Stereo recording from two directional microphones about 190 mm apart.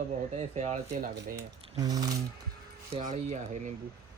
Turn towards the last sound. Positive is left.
turn(degrees=-40)  # may be behind; listen again after turning